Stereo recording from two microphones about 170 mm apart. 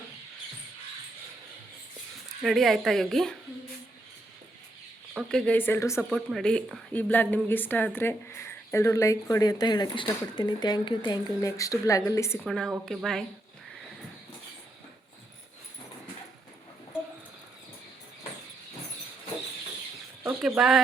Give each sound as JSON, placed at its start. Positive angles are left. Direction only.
{"t": 2.4, "sound": "a woman's voice", "side_deg": 0}
{"t": 5.1, "sound": "speech", "side_deg": 5}
{"t": 6.0, "sound": "speech", "side_deg": 0}
{"t": 12.4, "sound": "a woman's voice", "side_deg": 0}
{"t": 20.2, "sound": "speech", "side_deg": -5}